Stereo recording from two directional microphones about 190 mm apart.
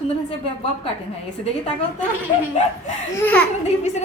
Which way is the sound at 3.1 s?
10° left (ahead or behind).